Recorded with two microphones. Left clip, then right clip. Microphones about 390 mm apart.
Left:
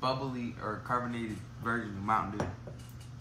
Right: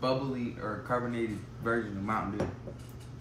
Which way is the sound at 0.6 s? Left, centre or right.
Centre.